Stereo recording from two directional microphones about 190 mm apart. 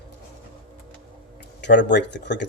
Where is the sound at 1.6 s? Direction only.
65° left (ahead or behind).